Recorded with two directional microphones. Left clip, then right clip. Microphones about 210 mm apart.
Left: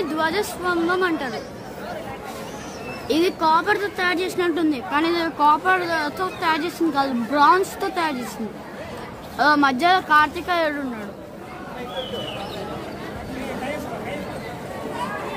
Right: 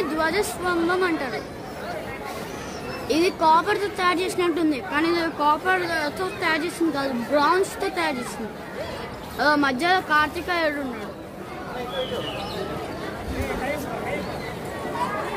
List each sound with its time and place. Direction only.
0.2 s speech: 25° left (ahead or behind)
3.1 s a woman's voice: 30° left (ahead or behind)
9.4 s a woman's voice: 40° left (ahead or behind)